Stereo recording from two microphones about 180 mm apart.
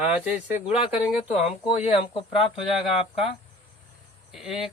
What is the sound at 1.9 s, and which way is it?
Speech, 30° left (ahead or behind).